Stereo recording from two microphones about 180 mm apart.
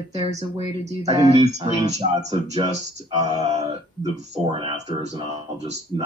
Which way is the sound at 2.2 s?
25° right (ahead or behind).